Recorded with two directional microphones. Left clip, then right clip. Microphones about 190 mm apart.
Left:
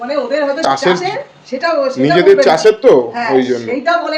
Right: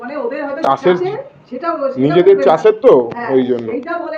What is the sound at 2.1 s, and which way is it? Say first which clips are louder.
A man's voice: left 1 dB; 15° left (ahead or behind).